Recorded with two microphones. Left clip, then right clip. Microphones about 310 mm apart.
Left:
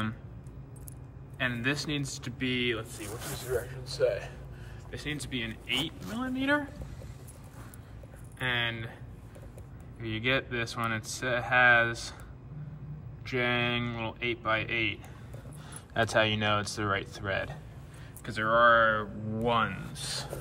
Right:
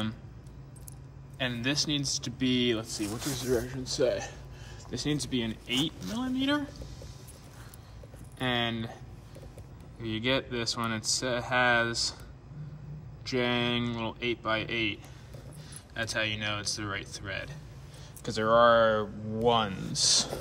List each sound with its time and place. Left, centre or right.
1.4 s a man's voice: centre
3.1 s speech: centre
3.7 s a man's voice: right; by 6.7 s centre
8.4 s a man's voice: centre
9.9 s a man's voice: centre
13.2 s a man's voice: centre
18.2 s a man's voice: centre